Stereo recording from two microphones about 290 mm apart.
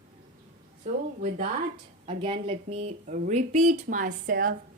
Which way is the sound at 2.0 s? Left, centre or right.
Centre.